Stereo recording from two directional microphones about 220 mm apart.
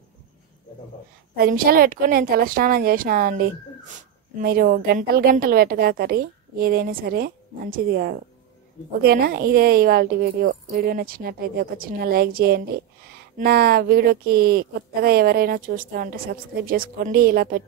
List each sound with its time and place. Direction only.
1.3 s a woman's voice: 40° right (ahead or behind)